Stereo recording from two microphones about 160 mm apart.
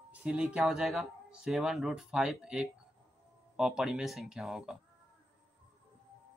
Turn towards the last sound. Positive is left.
turn(degrees=0)  # may be behind; listen again after turning